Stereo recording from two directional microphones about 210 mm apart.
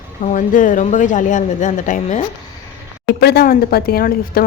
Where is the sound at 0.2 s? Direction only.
35° left (ahead or behind).